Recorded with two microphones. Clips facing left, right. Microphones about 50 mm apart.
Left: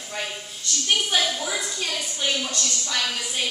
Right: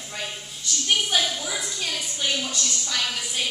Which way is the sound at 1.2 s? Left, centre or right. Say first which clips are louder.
Left 2 dB; centre.